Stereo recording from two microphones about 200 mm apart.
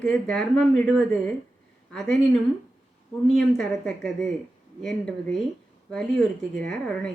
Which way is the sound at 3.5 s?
Centre (ahead or behind).